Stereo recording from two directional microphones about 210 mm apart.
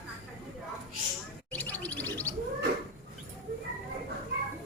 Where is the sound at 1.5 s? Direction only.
10° left (ahead or behind).